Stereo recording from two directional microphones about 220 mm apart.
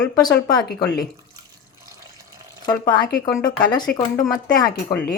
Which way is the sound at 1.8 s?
15° right (ahead or behind).